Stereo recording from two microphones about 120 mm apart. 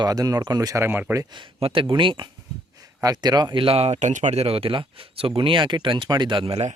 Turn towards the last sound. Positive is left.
turn(degrees=-45)  # may be behind; listen again after turning